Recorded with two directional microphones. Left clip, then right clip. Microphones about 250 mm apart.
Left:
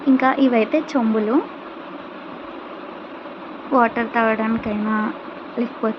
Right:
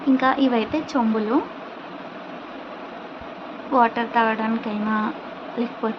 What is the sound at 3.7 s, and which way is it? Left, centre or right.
Speech, centre.